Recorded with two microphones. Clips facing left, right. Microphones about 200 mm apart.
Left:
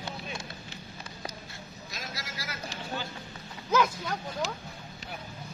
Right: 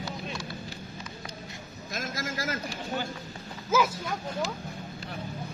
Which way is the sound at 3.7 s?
5° right (ahead or behind).